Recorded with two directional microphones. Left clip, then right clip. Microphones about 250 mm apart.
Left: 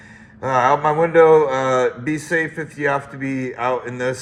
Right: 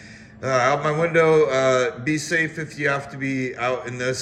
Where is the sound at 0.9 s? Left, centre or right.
Centre.